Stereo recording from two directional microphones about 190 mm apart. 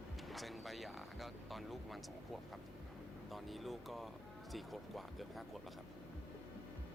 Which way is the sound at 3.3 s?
Centre (ahead or behind).